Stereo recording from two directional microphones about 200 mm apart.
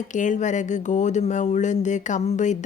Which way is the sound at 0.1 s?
40° left (ahead or behind).